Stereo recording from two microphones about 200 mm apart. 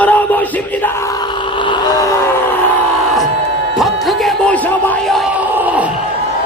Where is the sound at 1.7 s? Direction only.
20° left (ahead or behind).